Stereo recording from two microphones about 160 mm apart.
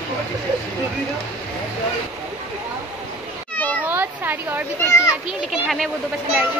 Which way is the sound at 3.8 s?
10° right (ahead or behind).